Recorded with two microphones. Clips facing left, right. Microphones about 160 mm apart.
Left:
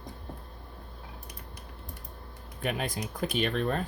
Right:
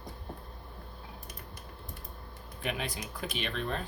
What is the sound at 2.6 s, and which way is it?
Speech, 45° left (ahead or behind).